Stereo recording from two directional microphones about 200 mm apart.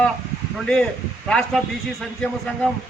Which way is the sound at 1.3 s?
5° left (ahead or behind).